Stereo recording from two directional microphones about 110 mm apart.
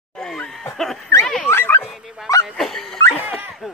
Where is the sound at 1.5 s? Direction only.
20° left (ahead or behind).